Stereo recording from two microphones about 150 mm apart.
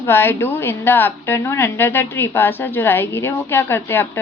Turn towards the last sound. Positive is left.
turn(degrees=15)  # may be behind; listen again after turning